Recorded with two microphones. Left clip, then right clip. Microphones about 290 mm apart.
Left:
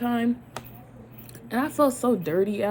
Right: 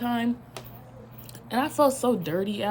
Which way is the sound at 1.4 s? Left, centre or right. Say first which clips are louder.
Even; right.